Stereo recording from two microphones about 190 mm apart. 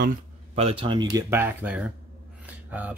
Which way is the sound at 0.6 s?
30° right (ahead or behind).